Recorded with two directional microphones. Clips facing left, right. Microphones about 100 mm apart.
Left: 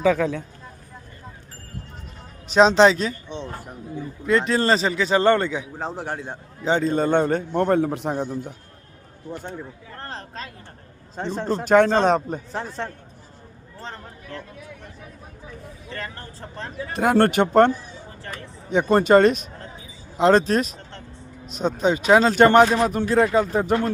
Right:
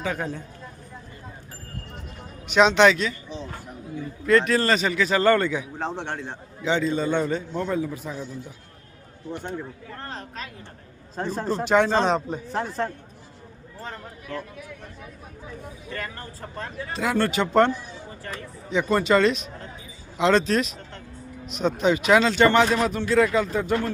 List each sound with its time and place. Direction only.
0.2 s speech: 80° left
2.5 s speech: 35° left (ahead or behind)
4.3 s speech: 20° left (ahead or behind)
5.8 s a man's voice: 5° left (ahead or behind)
6.6 s a man's voice: 45° left (ahead or behind); by 8.5 s 60° left (ahead or behind)
10.0 s speech: 35° left (ahead or behind)
11.2 s a man's voice: centre (ahead or behind)
11.6 s speech: 50° left (ahead or behind)
12.5 s a man's voice: centre (ahead or behind)
13.8 s a sound: 30° left (ahead or behind)
16.9 s speech: 55° left (ahead or behind)
22.6 s speech: 30° left (ahead or behind)